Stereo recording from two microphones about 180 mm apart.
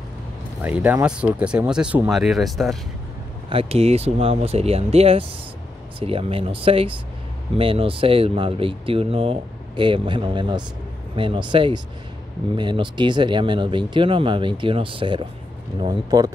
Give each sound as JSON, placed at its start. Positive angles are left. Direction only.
{"t": 0.6, "sound": "speech", "side_deg": -10}
{"t": 3.4, "sound": "speech", "side_deg": -30}